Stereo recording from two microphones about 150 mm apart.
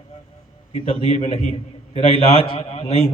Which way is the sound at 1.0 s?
50° left (ahead or behind).